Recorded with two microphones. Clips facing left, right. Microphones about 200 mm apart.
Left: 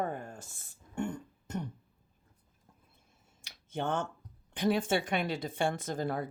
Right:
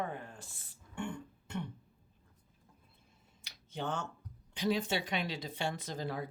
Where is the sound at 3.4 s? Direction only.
50° left (ahead or behind).